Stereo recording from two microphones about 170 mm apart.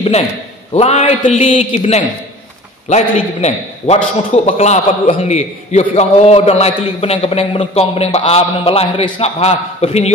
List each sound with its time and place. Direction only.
0.7 s a man's voice: 35° left (ahead or behind)